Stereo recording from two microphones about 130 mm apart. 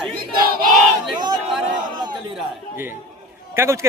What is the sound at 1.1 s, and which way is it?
Speech, 35° right (ahead or behind).